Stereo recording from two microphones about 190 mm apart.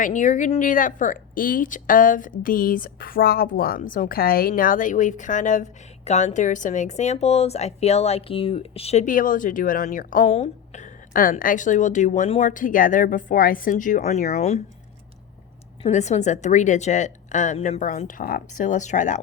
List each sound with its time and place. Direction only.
0.0 s a woman's voice: 40° left (ahead or behind)
15.8 s a woman's voice: 35° left (ahead or behind)